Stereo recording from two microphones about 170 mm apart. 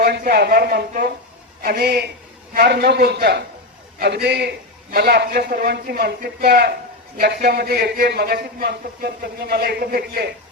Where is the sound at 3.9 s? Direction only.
65° right (ahead or behind).